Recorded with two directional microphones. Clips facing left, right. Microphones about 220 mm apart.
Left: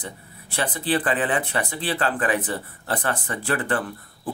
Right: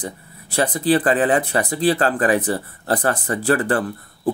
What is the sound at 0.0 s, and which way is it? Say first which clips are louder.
Speech: right 6 dB; 40° right (ahead or behind).